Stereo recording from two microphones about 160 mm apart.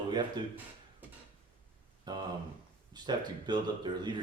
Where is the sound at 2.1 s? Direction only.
25° right (ahead or behind).